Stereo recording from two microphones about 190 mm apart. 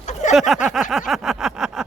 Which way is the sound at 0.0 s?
40° left (ahead or behind).